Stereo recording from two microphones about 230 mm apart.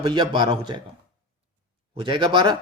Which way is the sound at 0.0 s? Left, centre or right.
Centre.